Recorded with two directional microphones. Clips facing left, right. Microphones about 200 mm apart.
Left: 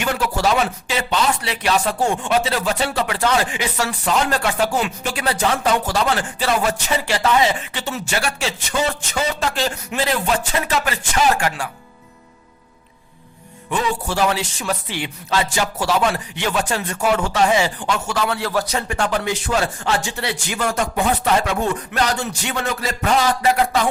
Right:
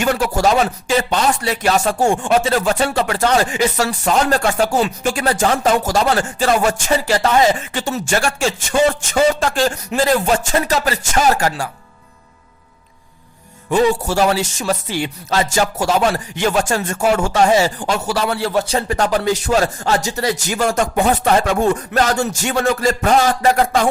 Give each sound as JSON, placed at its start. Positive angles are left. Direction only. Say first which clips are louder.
{"t": 0.0, "sound": "speech", "louder": "right 4 dB", "side_deg": -45}
{"t": 13.7, "sound": "speech", "louder": "right 7 dB", "side_deg": -40}